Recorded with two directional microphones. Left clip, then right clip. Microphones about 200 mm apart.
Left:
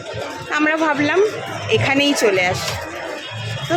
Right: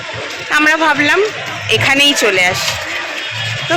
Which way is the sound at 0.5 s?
5° right (ahead or behind).